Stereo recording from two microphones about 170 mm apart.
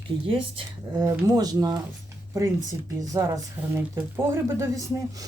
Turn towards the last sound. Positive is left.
turn(degrees=-20)  # may be behind; listen again after turning